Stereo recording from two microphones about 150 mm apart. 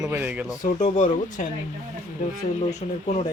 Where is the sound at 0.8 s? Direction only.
55° left (ahead or behind).